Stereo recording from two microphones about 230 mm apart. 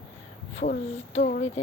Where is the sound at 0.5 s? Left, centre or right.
Left.